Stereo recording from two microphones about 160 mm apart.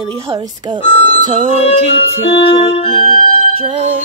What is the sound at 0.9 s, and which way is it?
Music, 40° left (ahead or behind).